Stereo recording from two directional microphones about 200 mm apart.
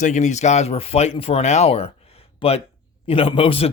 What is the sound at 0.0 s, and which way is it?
Speech, 35° left (ahead or behind).